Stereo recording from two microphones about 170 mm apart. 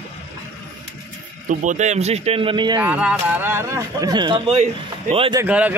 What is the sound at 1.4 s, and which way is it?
Speech, 45° right (ahead or behind).